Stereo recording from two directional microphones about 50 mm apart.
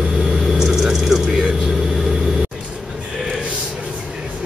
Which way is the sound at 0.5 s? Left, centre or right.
Centre.